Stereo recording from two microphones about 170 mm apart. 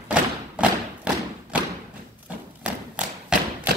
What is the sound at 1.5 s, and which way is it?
Thump, 5° right (ahead or behind).